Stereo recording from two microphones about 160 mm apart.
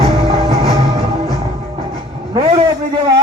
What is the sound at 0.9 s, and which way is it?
Music, 25° right (ahead or behind).